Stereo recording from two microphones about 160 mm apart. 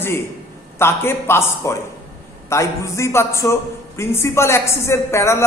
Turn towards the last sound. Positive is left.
turn(degrees=15)  # may be behind; listen again after turning